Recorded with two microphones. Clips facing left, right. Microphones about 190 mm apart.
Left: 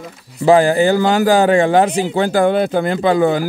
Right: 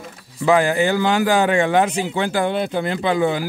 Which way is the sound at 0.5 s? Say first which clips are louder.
Left 5 dB; 35° left (ahead or behind).